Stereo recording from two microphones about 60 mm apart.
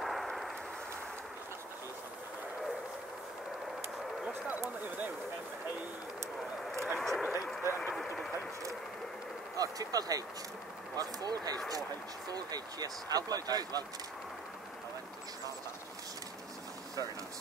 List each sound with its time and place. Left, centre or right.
0.0 s artillery fire: centre
4.8 s speech: right
7.0 s speech: centre
9.6 s speech: right